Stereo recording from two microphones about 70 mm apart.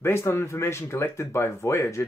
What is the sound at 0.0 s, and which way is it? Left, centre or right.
Speech, left.